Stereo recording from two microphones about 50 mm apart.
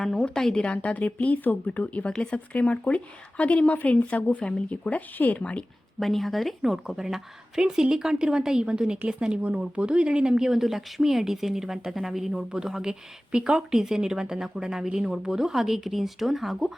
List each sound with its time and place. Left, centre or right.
0.2 s a woman's voice: centre
0.6 s a woman's voice: left
5.4 s a woman's voice: left
6.0 s speech: centre